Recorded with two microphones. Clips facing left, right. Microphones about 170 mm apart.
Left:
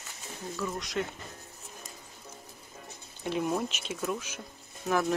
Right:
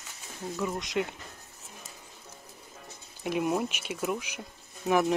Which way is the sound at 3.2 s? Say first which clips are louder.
Right 2 dB; 10° right (ahead or behind).